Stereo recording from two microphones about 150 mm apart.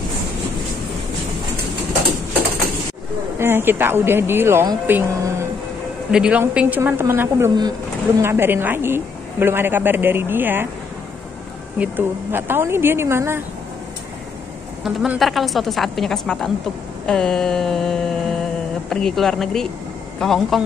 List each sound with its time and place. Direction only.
3.3 s a man's voice: 15° right (ahead or behind)
11.8 s a man's voice: 15° right (ahead or behind)
14.9 s a woman's voice: 5° right (ahead or behind)